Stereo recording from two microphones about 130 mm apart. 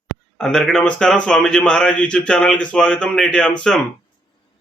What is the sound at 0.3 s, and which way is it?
Speech, 5° left (ahead or behind).